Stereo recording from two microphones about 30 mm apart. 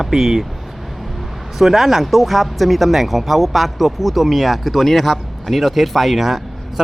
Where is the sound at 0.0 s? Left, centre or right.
Centre.